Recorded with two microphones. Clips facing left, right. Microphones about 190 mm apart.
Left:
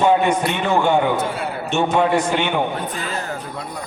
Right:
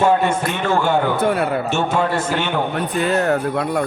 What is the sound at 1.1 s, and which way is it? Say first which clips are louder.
Speech: right 5 dB; 60° right (ahead or behind).